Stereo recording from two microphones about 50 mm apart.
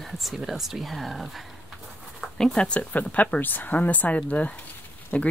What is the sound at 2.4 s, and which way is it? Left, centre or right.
Speech, centre.